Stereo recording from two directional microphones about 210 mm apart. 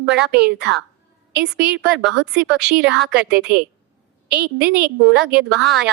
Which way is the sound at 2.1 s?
60° right (ahead or behind).